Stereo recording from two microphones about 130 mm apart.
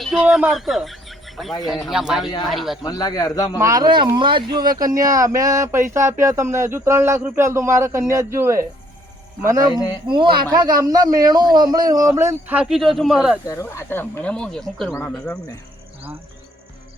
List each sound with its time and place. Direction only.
0.0 s speech: centre (ahead or behind)
2.8 s a man's voice: 30° left (ahead or behind)
3.6 s speech: 25° right (ahead or behind)
12.5 s speech: centre (ahead or behind)
13.5 s speech: 20° left (ahead or behind); by 14.9 s 5° left (ahead or behind)